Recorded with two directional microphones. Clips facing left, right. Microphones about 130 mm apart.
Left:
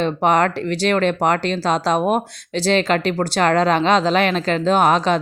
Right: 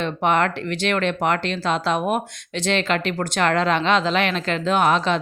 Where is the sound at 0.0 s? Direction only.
40° left (ahead or behind).